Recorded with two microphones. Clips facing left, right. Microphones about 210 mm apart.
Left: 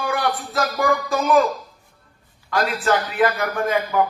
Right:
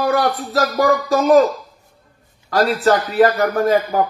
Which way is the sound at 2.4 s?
40° right (ahead or behind).